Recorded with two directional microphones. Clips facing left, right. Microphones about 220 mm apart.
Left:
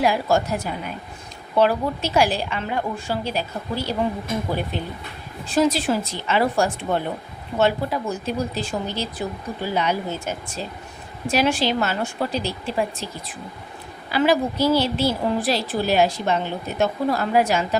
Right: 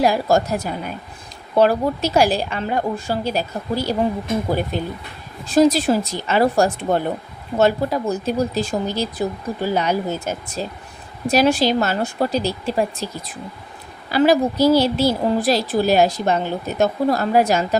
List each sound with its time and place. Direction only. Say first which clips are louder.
0.0 s a woman's voice: right 3 dB; 40° right (ahead or behind)